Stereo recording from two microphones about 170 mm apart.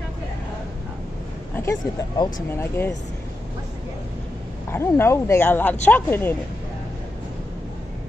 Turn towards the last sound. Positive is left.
turn(degrees=10)  # may be behind; listen again after turning